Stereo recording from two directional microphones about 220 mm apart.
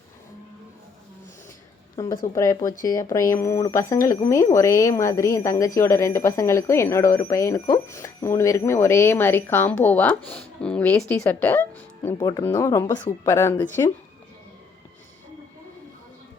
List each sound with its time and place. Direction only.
2.0 s speech: 15° left (ahead or behind)
12.1 s speech: 20° left (ahead or behind)